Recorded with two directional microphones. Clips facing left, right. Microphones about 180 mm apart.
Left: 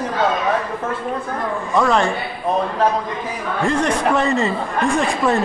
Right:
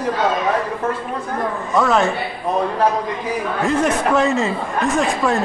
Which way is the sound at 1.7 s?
Centre (ahead or behind).